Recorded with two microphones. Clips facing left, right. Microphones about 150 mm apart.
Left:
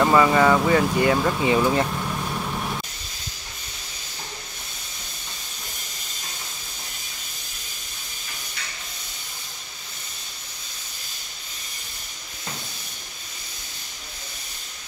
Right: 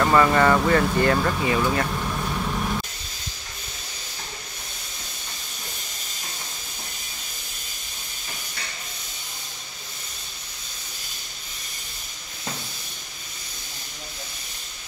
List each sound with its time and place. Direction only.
0.0 s speech: 10° left (ahead or behind)
1.4 s speech: 20° left (ahead or behind)